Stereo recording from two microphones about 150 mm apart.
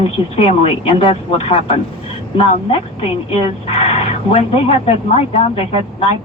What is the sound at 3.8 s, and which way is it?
Speech, 40° left (ahead or behind).